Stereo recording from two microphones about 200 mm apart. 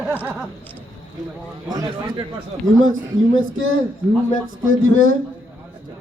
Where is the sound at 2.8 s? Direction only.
85° right.